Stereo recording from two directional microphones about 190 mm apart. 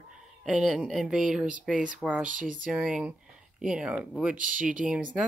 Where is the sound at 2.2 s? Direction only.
45° right (ahead or behind).